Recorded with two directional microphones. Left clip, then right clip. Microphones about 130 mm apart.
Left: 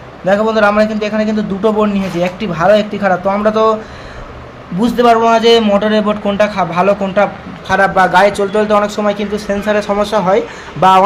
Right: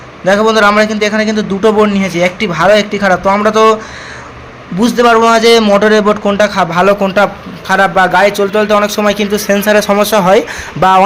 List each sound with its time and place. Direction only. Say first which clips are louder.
0.3 s a man's voice: right 3 dB; 15° right (ahead or behind)
4.8 s a man's voice: right 2 dB; 15° right (ahead or behind)
10.8 s speech: even; 35° right (ahead or behind)